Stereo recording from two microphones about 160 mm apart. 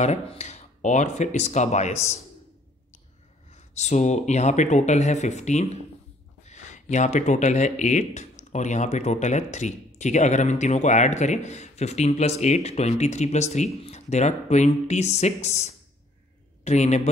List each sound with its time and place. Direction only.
0.0 s speech: 45° left (ahead or behind)
3.5 s speech: 45° left (ahead or behind)